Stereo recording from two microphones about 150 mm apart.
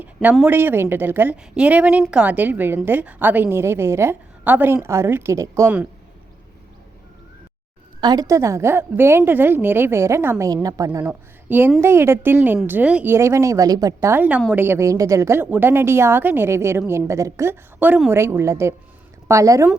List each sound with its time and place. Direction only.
0.0 s a sound: 10° right (ahead or behind)
0.4 s a woman's voice: 15° right (ahead or behind)
8.0 s a woman's voice: 25° right (ahead or behind)
11.0 s a woman's voice: 10° right (ahead or behind)